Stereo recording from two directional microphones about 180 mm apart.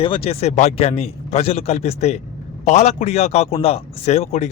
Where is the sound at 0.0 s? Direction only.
30° left (ahead or behind).